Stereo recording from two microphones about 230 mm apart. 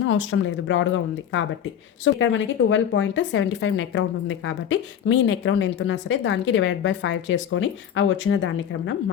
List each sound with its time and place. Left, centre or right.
0.0 s speech: left